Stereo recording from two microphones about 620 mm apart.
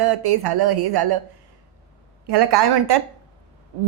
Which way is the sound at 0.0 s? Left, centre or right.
Right.